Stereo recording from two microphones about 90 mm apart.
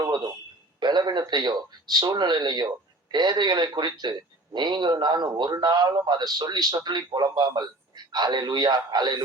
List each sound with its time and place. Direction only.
0.8 s a man's voice: 55° right (ahead or behind)